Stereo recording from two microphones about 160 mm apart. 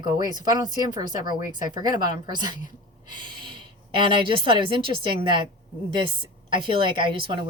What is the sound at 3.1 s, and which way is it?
Snort, 30° right (ahead or behind).